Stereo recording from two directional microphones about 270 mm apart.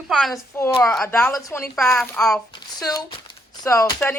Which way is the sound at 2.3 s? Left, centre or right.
Centre.